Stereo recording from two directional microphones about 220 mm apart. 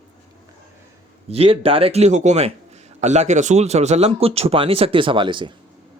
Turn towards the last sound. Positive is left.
turn(degrees=-20)  # may be behind; listen again after turning